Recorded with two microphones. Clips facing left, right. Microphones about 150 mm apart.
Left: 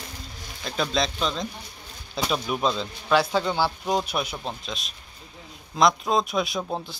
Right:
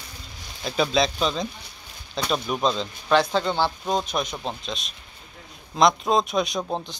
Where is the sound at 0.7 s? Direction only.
5° right (ahead or behind).